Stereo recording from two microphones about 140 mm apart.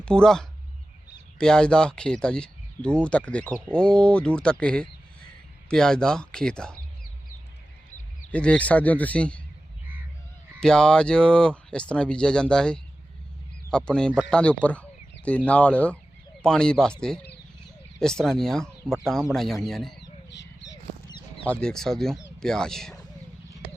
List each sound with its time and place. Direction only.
0.0 s speech: 5° left (ahead or behind)
8.3 s speech: 10° left (ahead or behind)
10.6 s speech: 5° left (ahead or behind)
21.1 s mouse: 30° left (ahead or behind)
21.4 s speech: 5° left (ahead or behind)